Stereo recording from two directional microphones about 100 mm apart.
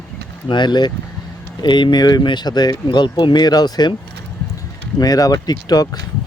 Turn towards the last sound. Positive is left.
turn(degrees=40)  # may be behind; listen again after turning